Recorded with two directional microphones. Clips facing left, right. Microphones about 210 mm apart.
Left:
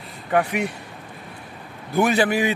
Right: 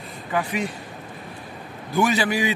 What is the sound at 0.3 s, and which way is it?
Speech, 65° left (ahead or behind).